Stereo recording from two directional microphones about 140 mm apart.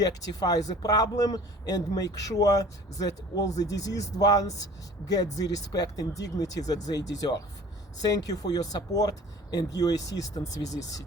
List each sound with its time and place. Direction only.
0.0 s speech: 25° left (ahead or behind)